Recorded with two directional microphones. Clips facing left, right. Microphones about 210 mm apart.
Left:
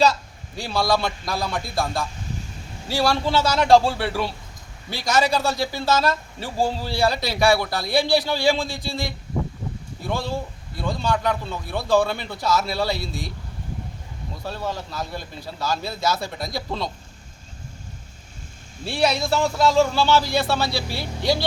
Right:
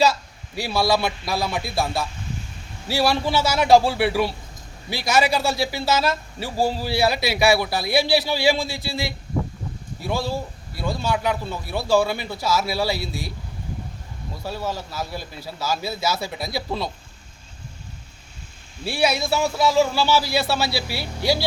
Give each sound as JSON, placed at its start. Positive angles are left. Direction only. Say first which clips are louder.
{"t": 0.5, "sound": "a man's voice", "louder": "right 1 dB", "side_deg": -10}
{"t": 14.4, "sound": "a man's voice", "louder": "right 1 dB", "side_deg": -5}
{"t": 18.9, "sound": "a man's voice", "louder": "even", "side_deg": -5}